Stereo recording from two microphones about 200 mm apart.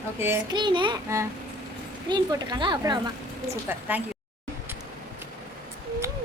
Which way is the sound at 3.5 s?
10° right (ahead or behind).